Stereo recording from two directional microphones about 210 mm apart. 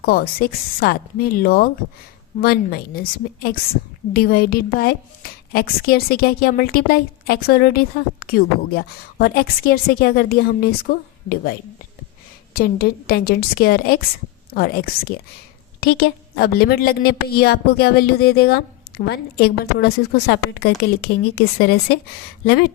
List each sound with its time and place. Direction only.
0.0 s a woman's voice: 45° left (ahead or behind)
12.5 s a woman's voice: 45° left (ahead or behind)